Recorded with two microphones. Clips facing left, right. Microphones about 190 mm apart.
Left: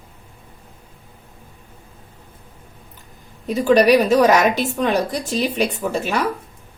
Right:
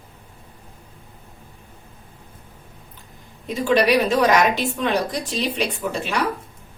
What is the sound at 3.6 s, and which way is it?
A woman's voice, 40° left (ahead or behind).